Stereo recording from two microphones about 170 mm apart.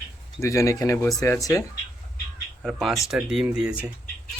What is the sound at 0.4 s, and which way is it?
Speech, 20° left (ahead or behind).